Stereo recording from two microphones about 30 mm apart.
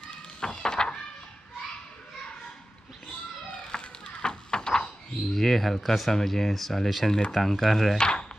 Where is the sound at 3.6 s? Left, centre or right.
Left.